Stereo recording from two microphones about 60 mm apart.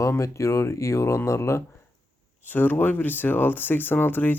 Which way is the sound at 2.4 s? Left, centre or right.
Left.